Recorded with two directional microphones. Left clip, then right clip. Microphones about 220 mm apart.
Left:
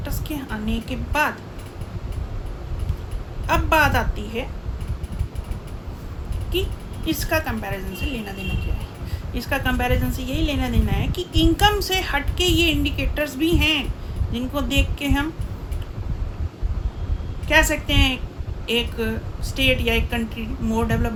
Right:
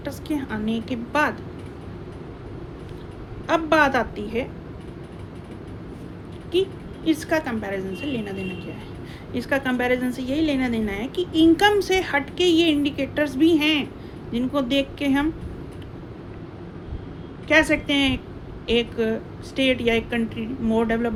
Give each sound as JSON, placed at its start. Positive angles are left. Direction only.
{"t": 0.0, "sound": "a woman's voice", "side_deg": 15}
{"t": 3.4, "sound": "a woman's voice", "side_deg": 15}
{"t": 6.5, "sound": "a woman's voice", "side_deg": 15}
{"t": 9.3, "sound": "a woman's voice", "side_deg": 15}
{"t": 17.5, "sound": "a woman's voice", "side_deg": 20}